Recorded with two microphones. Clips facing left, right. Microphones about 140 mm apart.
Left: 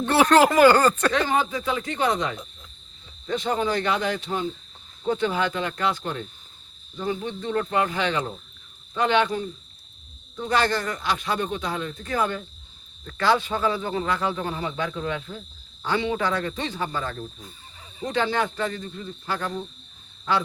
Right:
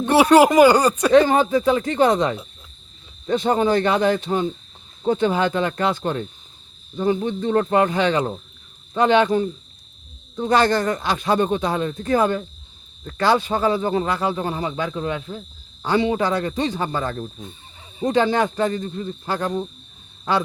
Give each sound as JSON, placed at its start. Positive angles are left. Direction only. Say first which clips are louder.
{"t": 0.0, "sound": "speech", "louder": "right 4 dB", "side_deg": -15}
{"t": 1.1, "sound": "speech", "louder": "right 9 dB", "side_deg": -35}
{"t": 3.4, "sound": "speech", "louder": "right 6 dB", "side_deg": -45}